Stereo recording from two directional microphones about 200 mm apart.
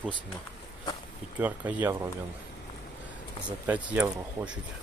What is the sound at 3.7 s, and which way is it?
Speech, 10° right (ahead or behind).